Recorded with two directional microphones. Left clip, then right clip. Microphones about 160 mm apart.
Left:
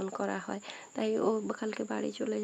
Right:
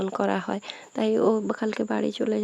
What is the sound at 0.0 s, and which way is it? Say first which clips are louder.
Speech: right 9 dB; 45° right (ahead or behind).